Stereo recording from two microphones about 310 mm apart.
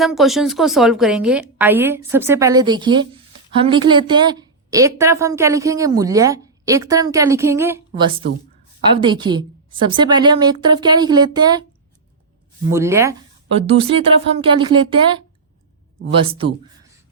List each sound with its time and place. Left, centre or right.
0.0 s a woman's voice: centre
12.7 s a woman's voice: centre
13.7 s a woman's voice: centre